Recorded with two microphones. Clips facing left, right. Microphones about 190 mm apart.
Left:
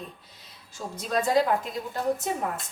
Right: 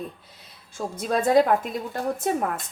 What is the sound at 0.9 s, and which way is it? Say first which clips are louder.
Speech: right 4 dB; 55° right (ahead or behind).